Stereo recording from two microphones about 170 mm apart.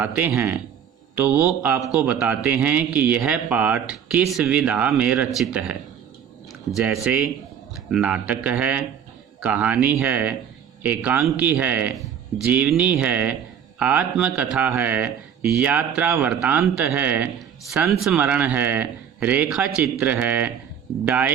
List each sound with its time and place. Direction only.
0.0 s a man's voice: 10° right (ahead or behind)